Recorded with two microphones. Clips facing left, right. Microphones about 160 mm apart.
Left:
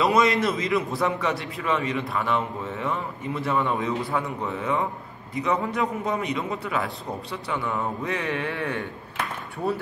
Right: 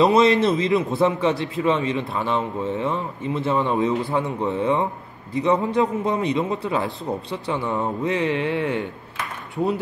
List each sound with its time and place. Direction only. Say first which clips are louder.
0.0 s a man's voice: right 5 dB; 25° right (ahead or behind)